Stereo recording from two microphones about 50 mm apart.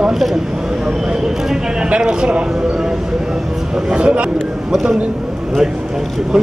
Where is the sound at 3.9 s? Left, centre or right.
Right.